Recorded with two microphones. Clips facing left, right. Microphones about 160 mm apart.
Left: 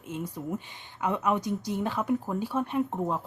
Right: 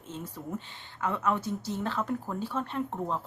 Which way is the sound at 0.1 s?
10° left (ahead or behind).